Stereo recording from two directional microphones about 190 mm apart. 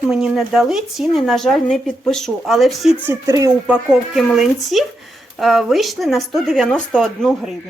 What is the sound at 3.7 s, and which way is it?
A woman's voice, centre (ahead or behind).